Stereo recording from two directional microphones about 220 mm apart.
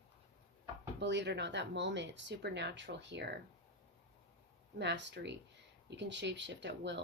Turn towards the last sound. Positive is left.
turn(degrees=-50)  # may be behind; listen again after turning